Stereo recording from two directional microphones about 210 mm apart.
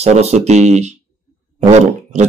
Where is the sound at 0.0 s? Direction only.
30° right (ahead or behind).